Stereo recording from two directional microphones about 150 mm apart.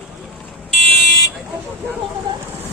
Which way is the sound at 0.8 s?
Centre (ahead or behind).